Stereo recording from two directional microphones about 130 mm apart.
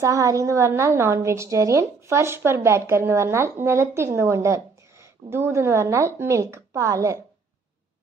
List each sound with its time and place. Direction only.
0.0 s a woman's voice: 25° right (ahead or behind)